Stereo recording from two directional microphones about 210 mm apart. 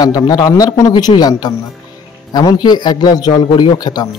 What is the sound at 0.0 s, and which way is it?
A man's voice, 20° left (ahead or behind).